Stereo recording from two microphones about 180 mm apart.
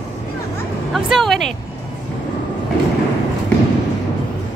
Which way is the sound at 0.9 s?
Centre (ahead or behind).